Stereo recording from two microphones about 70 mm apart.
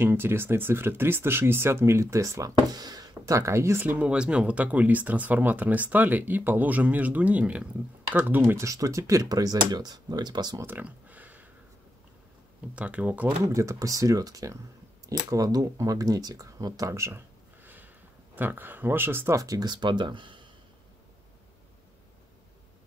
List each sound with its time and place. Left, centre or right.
0.0 s speech: right
2.7 s speech: right
3.8 s speech: right
8.6 s speech: right
10.8 s a sound: right
12.7 s speech: centre
13.5 s speech: right
17.6 s a sound: right
19.3 s speech: right